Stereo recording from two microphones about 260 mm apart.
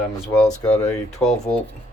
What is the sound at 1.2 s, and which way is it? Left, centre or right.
Speech, centre.